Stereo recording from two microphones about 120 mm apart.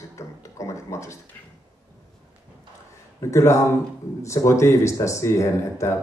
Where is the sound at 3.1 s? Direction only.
25° left (ahead or behind).